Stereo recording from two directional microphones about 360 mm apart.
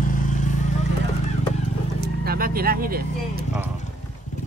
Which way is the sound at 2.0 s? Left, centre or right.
Right.